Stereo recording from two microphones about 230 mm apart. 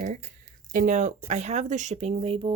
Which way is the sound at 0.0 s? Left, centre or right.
Right.